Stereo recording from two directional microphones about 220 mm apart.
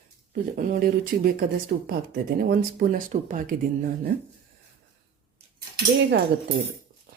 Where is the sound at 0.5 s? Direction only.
40° right (ahead or behind).